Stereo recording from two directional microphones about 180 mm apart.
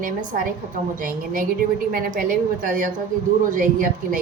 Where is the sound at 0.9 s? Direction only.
50° right (ahead or behind).